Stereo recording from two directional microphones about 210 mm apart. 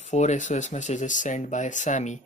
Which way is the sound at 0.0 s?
35° left (ahead or behind).